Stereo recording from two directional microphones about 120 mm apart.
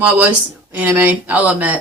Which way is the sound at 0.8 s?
15° right (ahead or behind).